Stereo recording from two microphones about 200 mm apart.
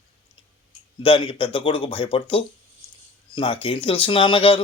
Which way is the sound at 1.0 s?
25° left (ahead or behind).